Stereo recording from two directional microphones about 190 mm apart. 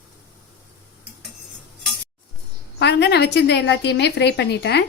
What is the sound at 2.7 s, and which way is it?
A woman's voice, 60° left (ahead or behind).